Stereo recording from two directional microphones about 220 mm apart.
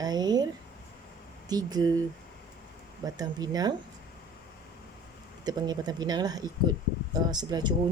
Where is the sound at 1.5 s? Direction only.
15° right (ahead or behind).